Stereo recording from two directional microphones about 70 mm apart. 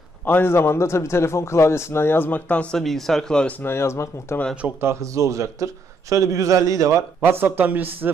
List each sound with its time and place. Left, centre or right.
0.3 s a man's voice: left
2.7 s speech: centre
3.6 s a man's voice: left
4.8 s a man's voice: right
7.2 s speech: right